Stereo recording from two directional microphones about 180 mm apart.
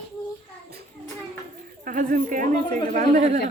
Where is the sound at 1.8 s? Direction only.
50° right (ahead or behind).